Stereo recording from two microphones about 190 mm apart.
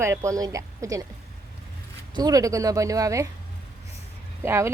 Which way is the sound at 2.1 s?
20° right (ahead or behind).